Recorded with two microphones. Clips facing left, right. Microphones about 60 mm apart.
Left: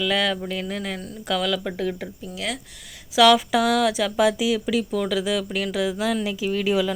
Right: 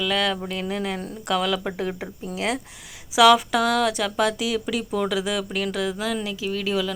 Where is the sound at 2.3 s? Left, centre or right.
Right.